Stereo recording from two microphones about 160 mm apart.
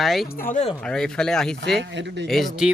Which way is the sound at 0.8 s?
5° left (ahead or behind).